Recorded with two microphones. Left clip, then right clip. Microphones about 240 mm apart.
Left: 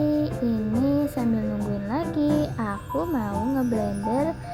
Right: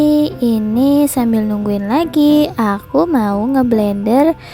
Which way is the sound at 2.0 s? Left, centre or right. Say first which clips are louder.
Right 12 dB; right.